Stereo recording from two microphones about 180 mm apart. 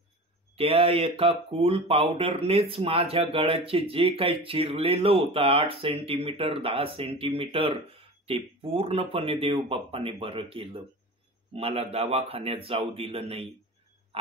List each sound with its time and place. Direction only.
0.6 s speech: 30° right (ahead or behind)